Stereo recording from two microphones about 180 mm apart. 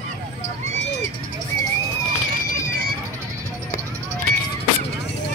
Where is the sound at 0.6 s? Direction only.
40° right (ahead or behind).